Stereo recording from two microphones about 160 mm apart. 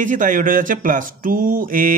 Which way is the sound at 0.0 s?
55° right (ahead or behind).